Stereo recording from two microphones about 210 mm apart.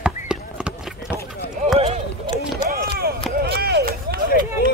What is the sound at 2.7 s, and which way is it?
Run, 45° right (ahead or behind).